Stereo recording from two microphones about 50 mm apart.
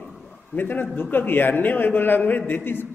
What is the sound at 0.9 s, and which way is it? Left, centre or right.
A man's voice, left.